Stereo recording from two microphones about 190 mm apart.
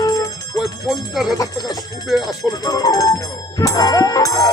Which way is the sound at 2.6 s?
20° left (ahead or behind).